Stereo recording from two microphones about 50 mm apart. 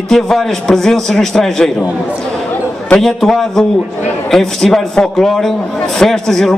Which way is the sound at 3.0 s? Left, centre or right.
Centre.